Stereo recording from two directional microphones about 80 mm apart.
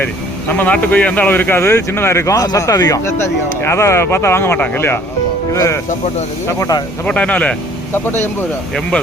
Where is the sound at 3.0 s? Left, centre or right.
Left.